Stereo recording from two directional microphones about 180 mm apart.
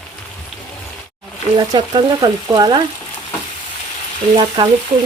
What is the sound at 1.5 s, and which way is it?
Speech, 25° right (ahead or behind).